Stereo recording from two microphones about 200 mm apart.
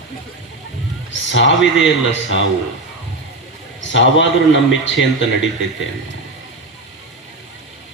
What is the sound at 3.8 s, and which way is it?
A man's voice, 65° left (ahead or behind).